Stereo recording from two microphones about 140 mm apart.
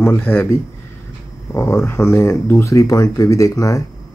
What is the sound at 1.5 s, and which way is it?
Speech, 15° left (ahead or behind).